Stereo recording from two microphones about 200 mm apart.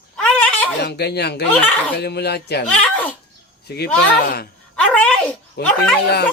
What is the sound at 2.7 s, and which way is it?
Speech, 5° left (ahead or behind).